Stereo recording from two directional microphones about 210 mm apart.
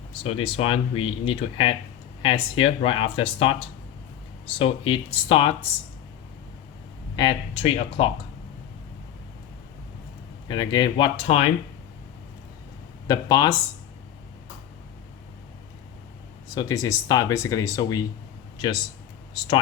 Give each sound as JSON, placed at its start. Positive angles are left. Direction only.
{"t": 0.1, "sound": "speech", "side_deg": 25}
{"t": 4.5, "sound": "speech", "side_deg": 25}
{"t": 7.2, "sound": "speech", "side_deg": 25}
{"t": 10.5, "sound": "speech", "side_deg": 20}
{"t": 13.1, "sound": "speech", "side_deg": 15}
{"t": 16.6, "sound": "speech", "side_deg": 15}
{"t": 18.5, "sound": "a sound", "side_deg": 20}